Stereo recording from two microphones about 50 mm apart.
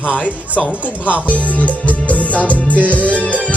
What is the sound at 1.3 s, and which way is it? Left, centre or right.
Music, left.